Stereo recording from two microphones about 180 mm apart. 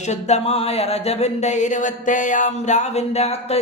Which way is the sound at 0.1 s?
40° left (ahead or behind).